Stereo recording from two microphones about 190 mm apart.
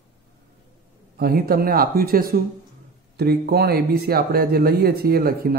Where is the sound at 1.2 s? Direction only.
55° right (ahead or behind).